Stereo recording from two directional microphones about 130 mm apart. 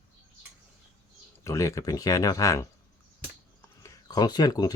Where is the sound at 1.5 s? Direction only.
25° left (ahead or behind).